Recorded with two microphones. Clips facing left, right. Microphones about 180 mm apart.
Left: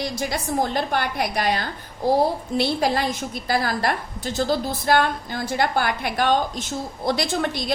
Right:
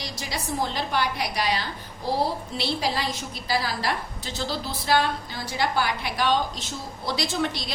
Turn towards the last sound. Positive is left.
turn(degrees=50)  # may be behind; listen again after turning